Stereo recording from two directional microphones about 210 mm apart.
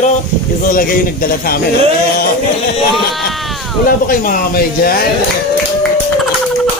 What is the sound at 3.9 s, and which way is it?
A man's voice, 40° left (ahead or behind).